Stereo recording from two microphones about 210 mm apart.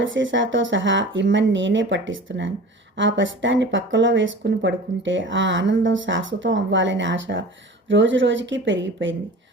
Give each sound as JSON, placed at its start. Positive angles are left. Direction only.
{"t": 0.0, "sound": "speech", "side_deg": -65}